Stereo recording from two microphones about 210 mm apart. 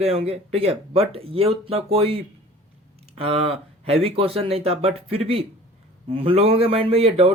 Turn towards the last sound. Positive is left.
turn(degrees=-30)  # may be behind; listen again after turning